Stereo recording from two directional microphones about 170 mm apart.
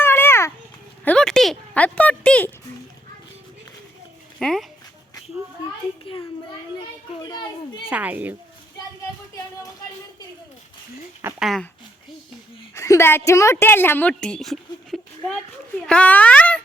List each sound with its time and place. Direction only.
0.0 s children playing: 15° left (ahead or behind)
1.0 s a sound: 5° left (ahead or behind)
4.4 s speech: 5° left (ahead or behind)
7.2 s a sound: 25° left (ahead or behind)
7.9 s speech: 10° right (ahead or behind)
11.2 s speech: 10° right (ahead or behind)
11.4 s speech: centre (ahead or behind)
12.7 s a woman's voice: 15° left (ahead or behind)